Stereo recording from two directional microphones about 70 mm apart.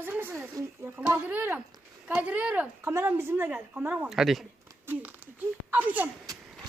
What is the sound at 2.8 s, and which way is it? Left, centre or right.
Speech, right.